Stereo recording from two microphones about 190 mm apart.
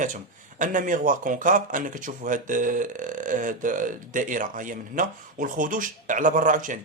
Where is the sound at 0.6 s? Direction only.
40° right (ahead or behind).